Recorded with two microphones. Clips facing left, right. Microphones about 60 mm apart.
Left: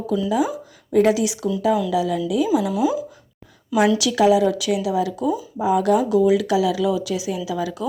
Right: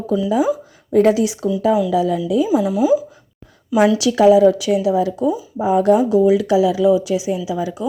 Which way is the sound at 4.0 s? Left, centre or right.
Right.